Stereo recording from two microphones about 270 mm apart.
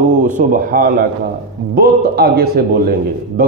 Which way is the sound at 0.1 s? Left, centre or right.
Right.